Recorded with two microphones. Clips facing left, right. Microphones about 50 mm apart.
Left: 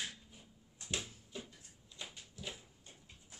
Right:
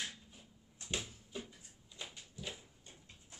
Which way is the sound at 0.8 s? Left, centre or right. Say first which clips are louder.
Even; centre.